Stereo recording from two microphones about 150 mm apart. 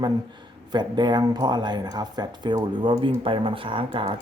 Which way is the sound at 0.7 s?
30° right (ahead or behind).